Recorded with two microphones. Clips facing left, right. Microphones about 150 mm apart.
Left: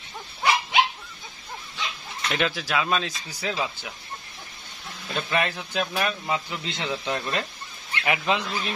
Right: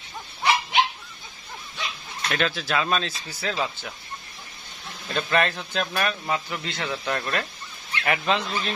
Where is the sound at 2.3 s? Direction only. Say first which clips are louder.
Even; 15° left (ahead or behind).